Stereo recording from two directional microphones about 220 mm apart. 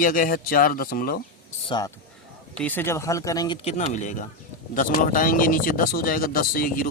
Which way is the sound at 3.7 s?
35° left (ahead or behind).